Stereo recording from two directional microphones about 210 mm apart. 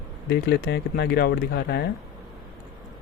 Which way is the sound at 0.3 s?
50° left (ahead or behind).